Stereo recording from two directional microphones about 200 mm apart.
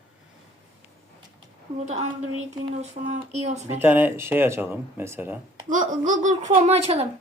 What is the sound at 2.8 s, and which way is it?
Speech, 35° right (ahead or behind).